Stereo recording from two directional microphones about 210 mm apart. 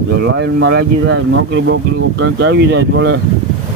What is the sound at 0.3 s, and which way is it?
Speech, 55° right (ahead or behind).